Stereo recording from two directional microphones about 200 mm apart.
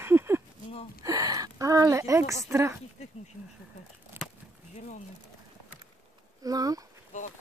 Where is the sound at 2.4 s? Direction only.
15° right (ahead or behind).